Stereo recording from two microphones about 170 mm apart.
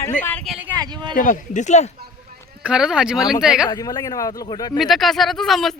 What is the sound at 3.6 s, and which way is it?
Speech, 25° left (ahead or behind).